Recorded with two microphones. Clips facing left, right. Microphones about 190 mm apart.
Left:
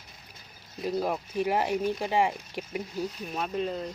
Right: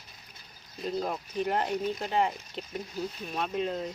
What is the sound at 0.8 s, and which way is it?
Speech, 10° left (ahead or behind).